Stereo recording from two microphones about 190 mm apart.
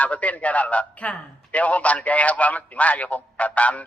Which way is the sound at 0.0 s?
10° left (ahead or behind).